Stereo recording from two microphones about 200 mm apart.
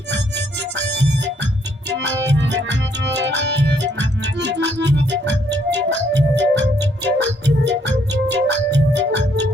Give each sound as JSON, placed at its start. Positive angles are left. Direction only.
{"t": 0.1, "sound": "music", "side_deg": -60}